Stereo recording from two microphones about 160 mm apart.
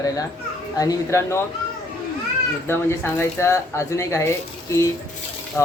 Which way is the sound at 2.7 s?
15° left (ahead or behind).